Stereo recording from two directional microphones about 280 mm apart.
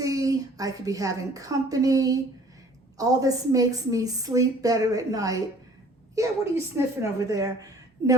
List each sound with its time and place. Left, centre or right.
0.0 s a woman's voice: centre